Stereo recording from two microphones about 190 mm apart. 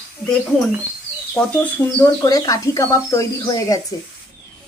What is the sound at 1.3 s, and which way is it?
Speech, 10° left (ahead or behind).